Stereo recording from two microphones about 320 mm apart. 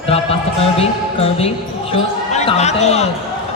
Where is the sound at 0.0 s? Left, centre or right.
Centre.